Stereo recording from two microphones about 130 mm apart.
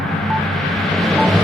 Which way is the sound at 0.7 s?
Centre (ahead or behind).